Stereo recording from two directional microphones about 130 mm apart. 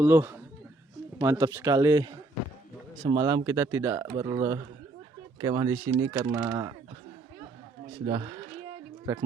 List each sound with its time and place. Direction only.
0.0 s speech: 15° right (ahead or behind)
1.6 s speech: 35° right (ahead or behind)
8.0 s speech: 40° right (ahead or behind)